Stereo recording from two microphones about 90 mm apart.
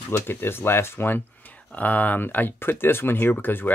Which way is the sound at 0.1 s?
25° left (ahead or behind).